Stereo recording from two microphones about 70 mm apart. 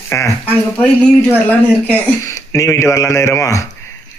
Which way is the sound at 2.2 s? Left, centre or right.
Left.